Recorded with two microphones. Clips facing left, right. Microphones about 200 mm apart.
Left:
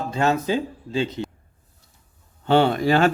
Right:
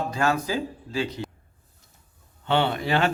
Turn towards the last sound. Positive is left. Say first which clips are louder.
# left 5 dB
turn(degrees=40)  # may be behind; listen again after turning